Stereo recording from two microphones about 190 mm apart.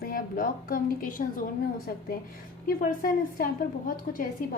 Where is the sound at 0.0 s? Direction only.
50° left (ahead or behind).